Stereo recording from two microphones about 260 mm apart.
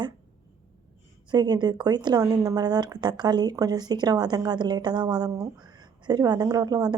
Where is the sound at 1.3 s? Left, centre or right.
Centre.